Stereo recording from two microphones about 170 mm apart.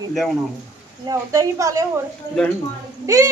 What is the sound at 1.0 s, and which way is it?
Speech, 20° right (ahead or behind).